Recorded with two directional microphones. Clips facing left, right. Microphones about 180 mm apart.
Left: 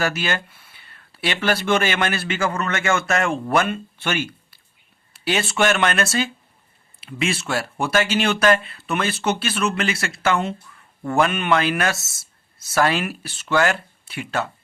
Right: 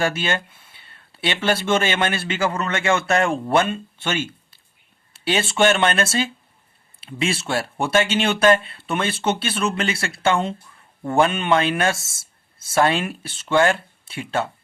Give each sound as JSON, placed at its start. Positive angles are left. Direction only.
{"t": 0.0, "sound": "speech", "side_deg": -25}